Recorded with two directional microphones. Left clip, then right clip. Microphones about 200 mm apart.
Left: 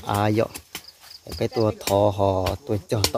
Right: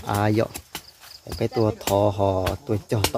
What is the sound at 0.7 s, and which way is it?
Horse, 30° left (ahead or behind).